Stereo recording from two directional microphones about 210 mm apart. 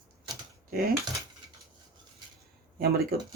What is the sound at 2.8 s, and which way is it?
Speech, 50° right (ahead or behind).